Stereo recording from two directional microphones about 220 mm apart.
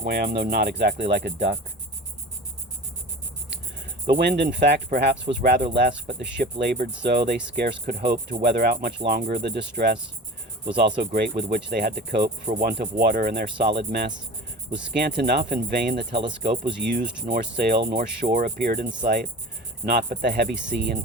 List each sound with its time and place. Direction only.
0.0 s speech: 45° right (ahead or behind)
4.1 s speech: 50° right (ahead or behind)
4.9 s speech: 35° right (ahead or behind)
5.4 s speech: 45° right (ahead or behind)
11.1 s speech: 50° right (ahead or behind)